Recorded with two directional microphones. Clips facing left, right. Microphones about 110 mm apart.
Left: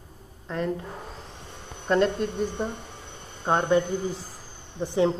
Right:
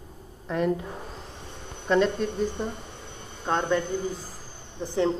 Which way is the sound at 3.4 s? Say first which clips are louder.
Left 3 dB; 15° left (ahead or behind).